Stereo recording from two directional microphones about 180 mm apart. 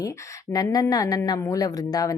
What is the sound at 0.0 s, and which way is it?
A woman's voice, 15° left (ahead or behind).